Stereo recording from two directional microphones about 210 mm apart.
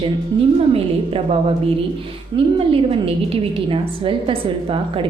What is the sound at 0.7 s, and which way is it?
Speech, 30° right (ahead or behind).